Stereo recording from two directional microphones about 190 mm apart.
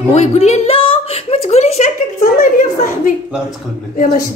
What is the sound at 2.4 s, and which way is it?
Speech, 45° left (ahead or behind).